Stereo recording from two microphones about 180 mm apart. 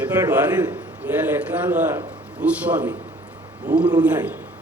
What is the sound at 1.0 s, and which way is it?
A man's voice, 10° right (ahead or behind).